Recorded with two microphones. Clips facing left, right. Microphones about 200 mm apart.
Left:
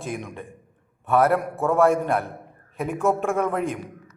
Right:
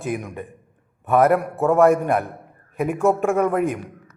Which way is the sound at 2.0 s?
15° right (ahead or behind).